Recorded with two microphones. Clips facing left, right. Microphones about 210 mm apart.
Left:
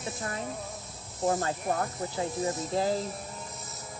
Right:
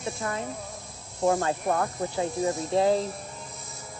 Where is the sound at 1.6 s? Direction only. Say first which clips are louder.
Right 4 dB; 55° right (ahead or behind).